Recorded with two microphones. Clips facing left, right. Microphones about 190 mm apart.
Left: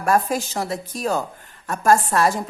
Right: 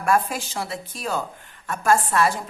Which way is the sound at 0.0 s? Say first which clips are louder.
Left 2 dB; 40° left (ahead or behind).